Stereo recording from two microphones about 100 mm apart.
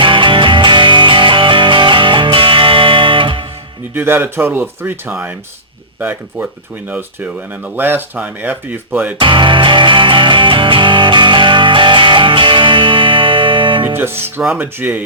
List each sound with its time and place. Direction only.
0.0 s music: 55° right (ahead or behind)
3.9 s speech: 20° right (ahead or behind)
9.1 s music: 55° right (ahead or behind)
13.8 s music: 25° right (ahead or behind)
14.2 s speech: 25° right (ahead or behind)